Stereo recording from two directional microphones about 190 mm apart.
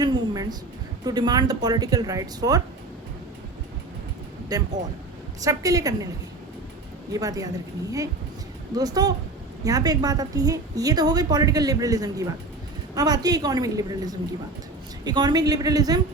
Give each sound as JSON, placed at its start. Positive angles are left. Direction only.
{"t": 0.0, "sound": "a sound", "side_deg": -20}
{"t": 1.0, "sound": "a woman's voice", "side_deg": -20}
{"t": 4.5, "sound": "a woman's voice", "side_deg": -20}
{"t": 7.1, "sound": "a woman's voice", "side_deg": -20}